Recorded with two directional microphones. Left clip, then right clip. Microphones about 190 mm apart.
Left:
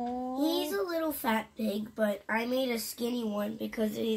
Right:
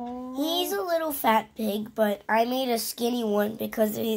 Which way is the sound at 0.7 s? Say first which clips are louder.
Right 5 dB; 60° right (ahead or behind).